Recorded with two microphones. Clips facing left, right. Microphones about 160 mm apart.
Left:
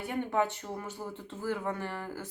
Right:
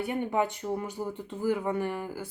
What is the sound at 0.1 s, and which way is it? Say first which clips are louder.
Speech: left 1 dB; 15° right (ahead or behind).